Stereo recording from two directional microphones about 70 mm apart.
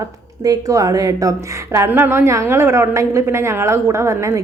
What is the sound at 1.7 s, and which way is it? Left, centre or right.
A woman's voice, right.